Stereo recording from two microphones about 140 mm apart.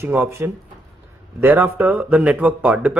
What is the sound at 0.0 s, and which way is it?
Speech, 15° right (ahead or behind).